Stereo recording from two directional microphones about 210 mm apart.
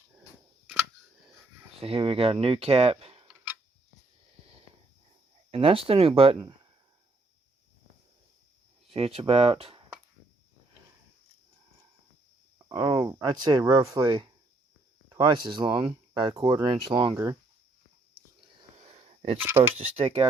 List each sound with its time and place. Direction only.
1.8 s speech: 25° right (ahead or behind)
5.5 s speech: 25° right (ahead or behind)
8.9 s speech: 25° right (ahead or behind)
12.6 s speech: 15° right (ahead or behind)
15.3 s speech: 25° right (ahead or behind)
18.9 s a sound: 30° right (ahead or behind)
19.4 s speech: 10° right (ahead or behind)
20.0 s speech: 25° right (ahead or behind)